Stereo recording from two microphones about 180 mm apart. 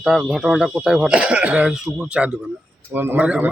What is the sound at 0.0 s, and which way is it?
Speech, centre (ahead or behind).